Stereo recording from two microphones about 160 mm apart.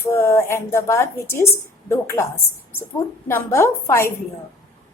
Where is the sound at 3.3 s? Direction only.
15° left (ahead or behind).